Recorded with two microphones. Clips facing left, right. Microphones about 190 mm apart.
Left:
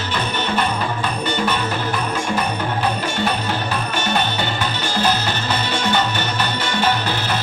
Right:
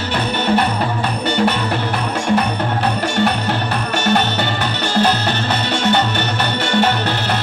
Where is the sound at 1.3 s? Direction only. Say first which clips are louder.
Right 6 dB; 65° right (ahead or behind).